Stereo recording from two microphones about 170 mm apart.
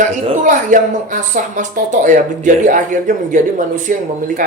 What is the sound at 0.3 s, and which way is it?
Speech, 50° right (ahead or behind).